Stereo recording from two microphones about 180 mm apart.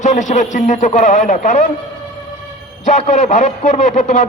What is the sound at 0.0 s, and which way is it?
A man's voice, 40° left (ahead or behind).